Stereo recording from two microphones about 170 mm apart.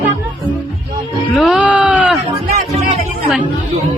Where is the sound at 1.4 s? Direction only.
5° right (ahead or behind).